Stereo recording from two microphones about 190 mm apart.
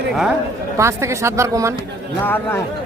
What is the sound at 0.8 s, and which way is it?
Speech, 15° right (ahead or behind).